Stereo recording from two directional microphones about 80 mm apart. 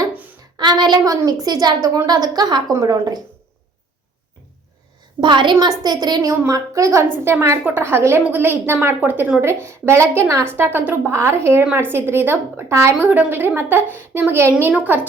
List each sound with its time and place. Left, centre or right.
0.5 s a woman's voice: right
5.2 s a woman's voice: right
6.5 s a woman's voice: right
7.3 s a woman's voice: right
9.6 s a woman's voice: right
13.0 s a woman's voice: right